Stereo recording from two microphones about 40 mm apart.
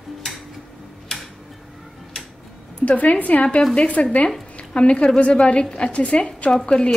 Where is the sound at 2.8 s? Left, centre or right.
Left.